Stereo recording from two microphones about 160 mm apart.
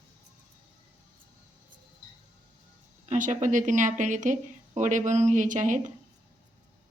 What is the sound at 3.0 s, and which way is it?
Speech, 50° right (ahead or behind).